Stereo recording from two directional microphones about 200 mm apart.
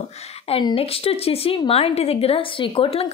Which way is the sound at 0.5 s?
25° left (ahead or behind).